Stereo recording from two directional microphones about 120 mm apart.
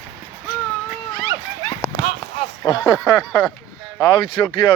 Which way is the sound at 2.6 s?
35° left (ahead or behind).